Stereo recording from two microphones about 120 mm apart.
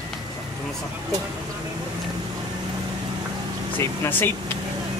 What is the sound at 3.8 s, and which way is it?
Speech, 20° left (ahead or behind).